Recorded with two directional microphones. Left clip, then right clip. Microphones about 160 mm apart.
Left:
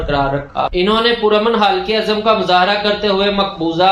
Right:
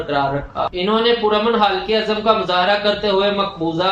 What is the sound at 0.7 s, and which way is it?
Speech, 65° left (ahead or behind).